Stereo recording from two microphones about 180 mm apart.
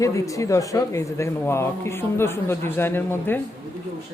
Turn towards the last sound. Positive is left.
turn(degrees=10)  # may be behind; listen again after turning